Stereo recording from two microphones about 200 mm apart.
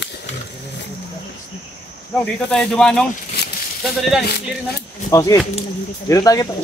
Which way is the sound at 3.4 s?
55° left (ahead or behind).